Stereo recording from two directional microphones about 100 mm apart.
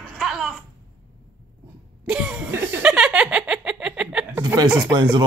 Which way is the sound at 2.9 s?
5° right (ahead or behind).